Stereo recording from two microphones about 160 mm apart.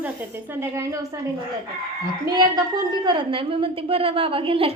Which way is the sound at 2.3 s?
25° right (ahead or behind).